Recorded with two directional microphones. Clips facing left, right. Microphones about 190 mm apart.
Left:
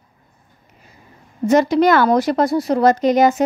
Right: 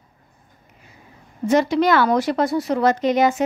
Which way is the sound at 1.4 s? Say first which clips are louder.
Left 3 dB; 40° left (ahead or behind).